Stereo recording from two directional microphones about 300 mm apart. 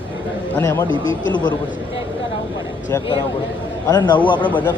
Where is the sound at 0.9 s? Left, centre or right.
Left.